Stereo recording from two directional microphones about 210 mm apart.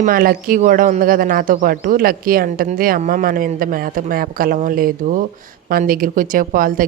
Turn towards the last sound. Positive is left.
turn(degrees=-40)  # may be behind; listen again after turning